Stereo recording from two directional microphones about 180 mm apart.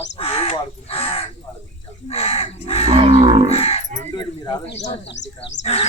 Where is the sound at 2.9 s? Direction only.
35° right (ahead or behind).